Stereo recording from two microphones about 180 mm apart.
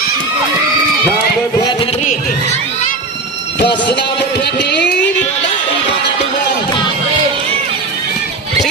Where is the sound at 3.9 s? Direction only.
70° left (ahead or behind).